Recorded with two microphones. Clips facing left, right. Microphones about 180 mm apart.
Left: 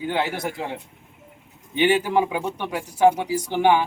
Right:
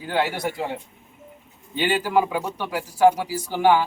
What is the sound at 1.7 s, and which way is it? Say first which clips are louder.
Speech: left 2 dB; 20° left (ahead or behind).